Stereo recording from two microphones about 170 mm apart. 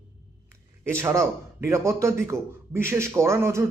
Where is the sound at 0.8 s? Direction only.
15° right (ahead or behind).